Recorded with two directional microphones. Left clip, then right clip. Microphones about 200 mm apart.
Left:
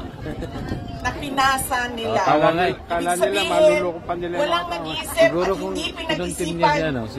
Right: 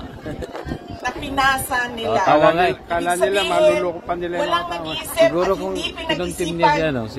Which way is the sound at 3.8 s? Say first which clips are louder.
Right 2 dB; 55° right (ahead or behind).